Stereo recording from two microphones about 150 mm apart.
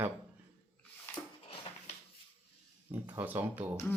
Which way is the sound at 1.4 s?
40° left (ahead or behind).